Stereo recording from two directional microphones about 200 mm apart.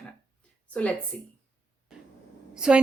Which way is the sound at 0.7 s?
5° left (ahead or behind).